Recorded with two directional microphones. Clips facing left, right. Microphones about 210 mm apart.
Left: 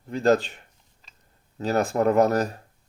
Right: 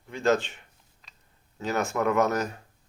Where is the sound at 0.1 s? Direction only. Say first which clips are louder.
Left 4 dB; 35° left (ahead or behind).